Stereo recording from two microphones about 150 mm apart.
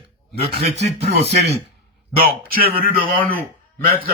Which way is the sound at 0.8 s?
45° right (ahead or behind).